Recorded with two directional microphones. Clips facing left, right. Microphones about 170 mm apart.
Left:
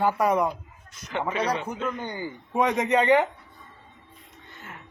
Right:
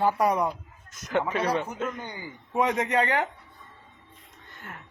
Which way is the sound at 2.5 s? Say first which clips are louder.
Left 2 dB; 25° left (ahead or behind).